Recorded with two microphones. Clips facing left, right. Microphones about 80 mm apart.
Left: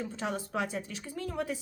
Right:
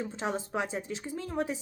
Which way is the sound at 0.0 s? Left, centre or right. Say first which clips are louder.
Right 2 dB; right.